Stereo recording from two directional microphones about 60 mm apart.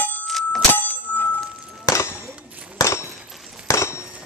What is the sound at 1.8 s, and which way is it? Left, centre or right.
Clang, left.